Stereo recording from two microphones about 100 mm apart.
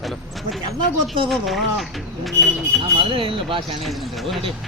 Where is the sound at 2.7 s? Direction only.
Centre (ahead or behind).